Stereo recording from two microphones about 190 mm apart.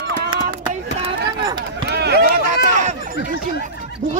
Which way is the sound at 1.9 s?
60° right (ahead or behind).